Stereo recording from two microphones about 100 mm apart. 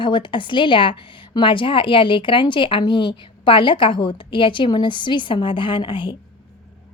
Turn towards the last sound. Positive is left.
turn(degrees=60)  # may be behind; listen again after turning